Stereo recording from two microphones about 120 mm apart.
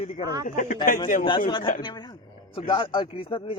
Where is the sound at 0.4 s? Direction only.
90° left.